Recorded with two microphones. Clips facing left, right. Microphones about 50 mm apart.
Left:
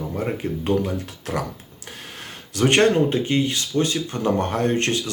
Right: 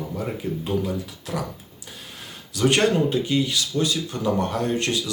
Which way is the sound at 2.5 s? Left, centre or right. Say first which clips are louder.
Left 3 dB; left.